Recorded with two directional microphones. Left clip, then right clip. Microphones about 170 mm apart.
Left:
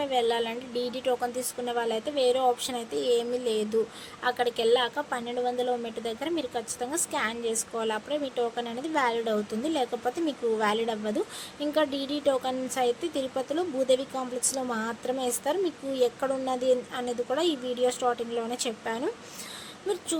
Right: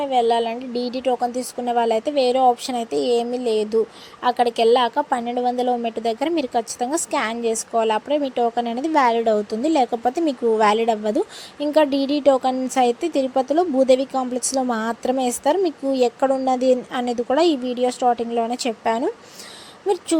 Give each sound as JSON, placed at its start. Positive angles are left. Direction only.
{"t": 0.0, "sound": "speech", "side_deg": -30}